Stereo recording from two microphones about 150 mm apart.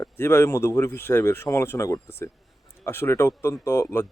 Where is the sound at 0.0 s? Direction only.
15° left (ahead or behind).